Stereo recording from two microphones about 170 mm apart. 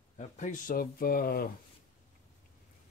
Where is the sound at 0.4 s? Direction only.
50° left (ahead or behind).